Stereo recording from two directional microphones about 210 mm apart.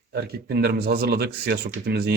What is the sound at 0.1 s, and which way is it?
A man's voice, 50° right (ahead or behind).